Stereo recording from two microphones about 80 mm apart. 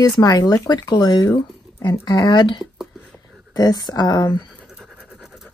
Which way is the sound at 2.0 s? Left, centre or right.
Left.